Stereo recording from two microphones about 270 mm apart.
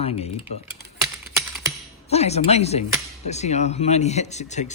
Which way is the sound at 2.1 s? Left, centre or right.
Left.